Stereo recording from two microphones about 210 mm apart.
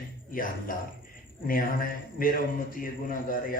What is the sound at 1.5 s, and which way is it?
A man's voice, 40° left (ahead or behind).